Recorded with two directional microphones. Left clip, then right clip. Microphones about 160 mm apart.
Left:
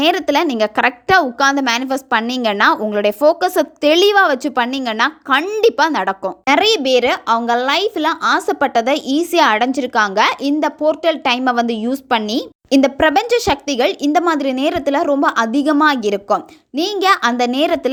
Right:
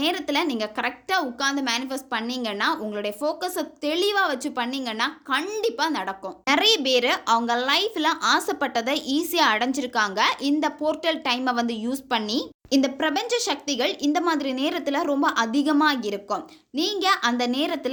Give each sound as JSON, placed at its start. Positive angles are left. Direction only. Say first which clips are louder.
{"t": 0.0, "sound": "a woman's voice", "louder": "left 10 dB", "side_deg": 55}
{"t": 6.4, "sound": "speech", "louder": "left 6 dB", "side_deg": 40}